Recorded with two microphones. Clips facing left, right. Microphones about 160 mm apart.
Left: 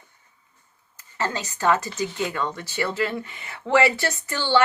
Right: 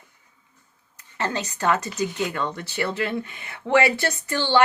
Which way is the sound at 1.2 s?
20° right (ahead or behind).